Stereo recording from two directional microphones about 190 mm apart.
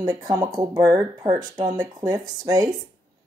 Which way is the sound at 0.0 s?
20° right (ahead or behind).